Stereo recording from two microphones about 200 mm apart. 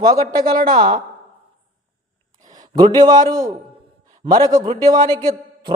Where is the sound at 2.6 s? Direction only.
20° right (ahead or behind).